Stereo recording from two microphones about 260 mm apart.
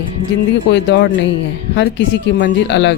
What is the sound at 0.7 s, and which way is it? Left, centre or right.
Speech, left.